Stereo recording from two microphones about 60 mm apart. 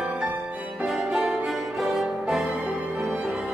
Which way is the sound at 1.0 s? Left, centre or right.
Centre.